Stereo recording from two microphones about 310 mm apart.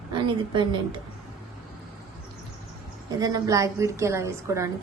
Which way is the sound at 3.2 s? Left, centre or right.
Centre.